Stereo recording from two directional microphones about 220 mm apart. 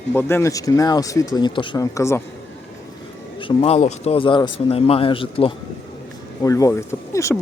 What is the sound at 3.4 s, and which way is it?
Speech, 25° left (ahead or behind).